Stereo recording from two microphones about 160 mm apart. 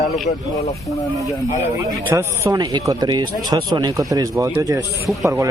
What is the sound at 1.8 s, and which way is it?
Speech, 15° right (ahead or behind).